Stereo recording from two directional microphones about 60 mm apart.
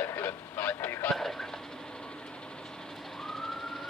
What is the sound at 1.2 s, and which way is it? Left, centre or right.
Vehicle, centre.